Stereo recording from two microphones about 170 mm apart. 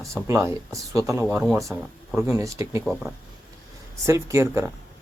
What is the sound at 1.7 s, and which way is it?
Speech, 20° right (ahead or behind).